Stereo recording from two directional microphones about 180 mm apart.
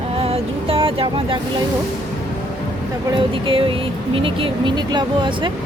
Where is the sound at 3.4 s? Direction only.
30° right (ahead or behind).